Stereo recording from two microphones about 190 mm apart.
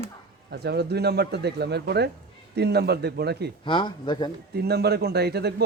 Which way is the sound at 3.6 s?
25° left (ahead or behind).